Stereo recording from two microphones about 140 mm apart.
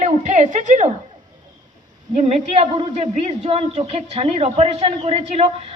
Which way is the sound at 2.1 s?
55° right (ahead or behind).